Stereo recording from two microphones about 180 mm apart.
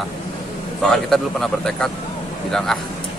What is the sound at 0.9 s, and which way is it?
Speech, centre (ahead or behind).